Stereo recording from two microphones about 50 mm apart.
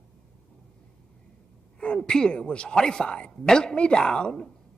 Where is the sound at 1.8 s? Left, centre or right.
Centre.